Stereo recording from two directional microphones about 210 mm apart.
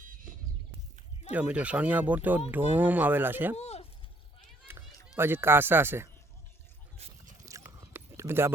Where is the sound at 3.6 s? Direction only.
30° left (ahead or behind).